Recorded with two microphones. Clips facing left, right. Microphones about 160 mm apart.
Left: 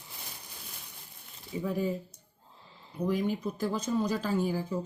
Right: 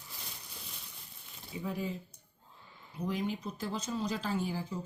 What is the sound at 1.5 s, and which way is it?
Speech, 35° left (ahead or behind).